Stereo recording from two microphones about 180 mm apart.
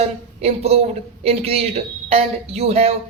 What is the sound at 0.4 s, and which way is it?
Speech, 35° right (ahead or behind).